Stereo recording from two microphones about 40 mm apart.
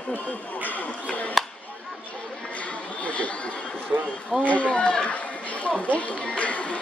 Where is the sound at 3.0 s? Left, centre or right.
Left.